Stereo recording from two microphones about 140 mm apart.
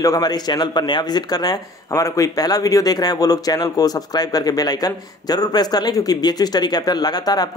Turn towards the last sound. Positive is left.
turn(degrees=30)  # may be behind; listen again after turning